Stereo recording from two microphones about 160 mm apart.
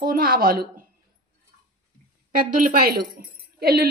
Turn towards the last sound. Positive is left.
turn(degrees=-75)  # may be behind; listen again after turning